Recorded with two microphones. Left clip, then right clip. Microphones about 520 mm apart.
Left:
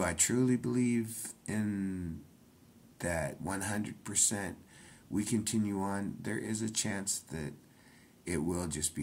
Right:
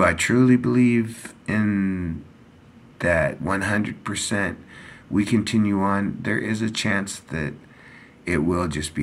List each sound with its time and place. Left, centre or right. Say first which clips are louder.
0.0 s speech: right 13 dB; left